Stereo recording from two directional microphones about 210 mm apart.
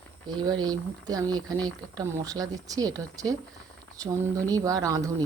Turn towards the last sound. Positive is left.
turn(degrees=-15)  # may be behind; listen again after turning